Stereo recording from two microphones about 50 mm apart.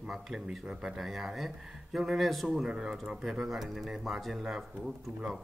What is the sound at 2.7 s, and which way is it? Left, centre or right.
Speech, centre.